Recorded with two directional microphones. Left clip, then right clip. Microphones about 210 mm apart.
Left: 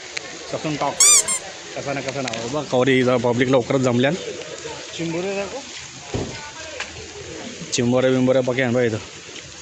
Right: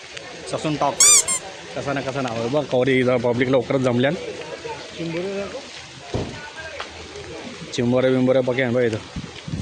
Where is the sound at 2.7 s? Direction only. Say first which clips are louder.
Left 3 dB; 10° left (ahead or behind).